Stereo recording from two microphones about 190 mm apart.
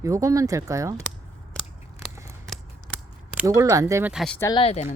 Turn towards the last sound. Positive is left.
turn(degrees=35)  # may be behind; listen again after turning